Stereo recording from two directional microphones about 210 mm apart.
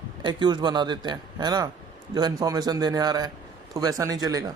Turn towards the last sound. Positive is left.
turn(degrees=-15)  # may be behind; listen again after turning